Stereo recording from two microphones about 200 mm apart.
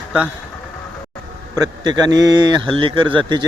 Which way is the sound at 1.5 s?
20° right (ahead or behind).